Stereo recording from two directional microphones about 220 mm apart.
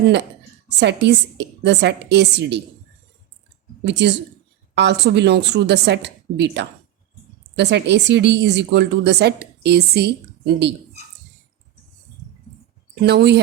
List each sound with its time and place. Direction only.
0.8 s a woman's voice: 50° right (ahead or behind)
3.8 s a woman's voice: 50° right (ahead or behind)
13.0 s a woman's voice: 50° right (ahead or behind)